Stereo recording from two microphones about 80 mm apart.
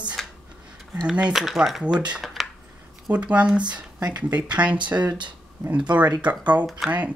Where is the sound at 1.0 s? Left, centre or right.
Centre.